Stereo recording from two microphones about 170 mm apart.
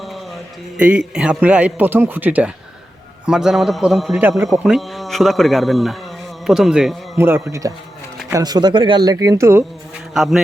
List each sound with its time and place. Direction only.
0.8 s a man's voice: 10° right (ahead or behind)
7.2 s a man's voice: 15° right (ahead or behind)
10.2 s speech: centre (ahead or behind)